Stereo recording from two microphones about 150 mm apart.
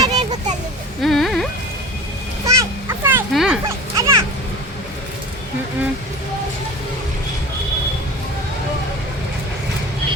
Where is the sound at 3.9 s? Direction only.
20° right (ahead or behind).